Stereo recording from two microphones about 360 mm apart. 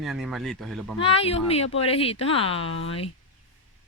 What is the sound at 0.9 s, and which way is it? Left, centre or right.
Speech, centre.